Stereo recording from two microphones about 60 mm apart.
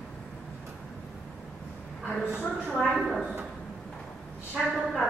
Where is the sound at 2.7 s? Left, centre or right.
Centre.